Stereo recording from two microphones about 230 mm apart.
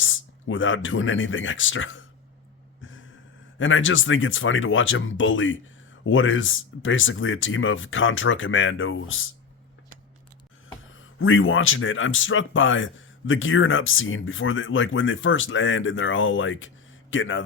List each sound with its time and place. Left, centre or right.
0.0 s speech: left
3.6 s speech: left
11.2 s speech: left